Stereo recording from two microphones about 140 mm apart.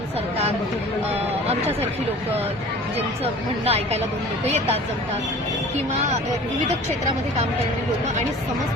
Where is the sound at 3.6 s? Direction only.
45° right (ahead or behind).